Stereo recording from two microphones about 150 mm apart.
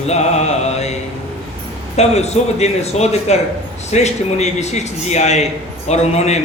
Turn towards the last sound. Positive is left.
turn(degrees=45)  # may be behind; listen again after turning